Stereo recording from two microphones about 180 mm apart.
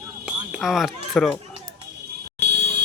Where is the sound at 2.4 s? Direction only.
70° right (ahead or behind).